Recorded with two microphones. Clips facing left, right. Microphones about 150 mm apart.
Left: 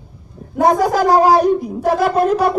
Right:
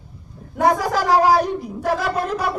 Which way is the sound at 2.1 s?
45° left (ahead or behind).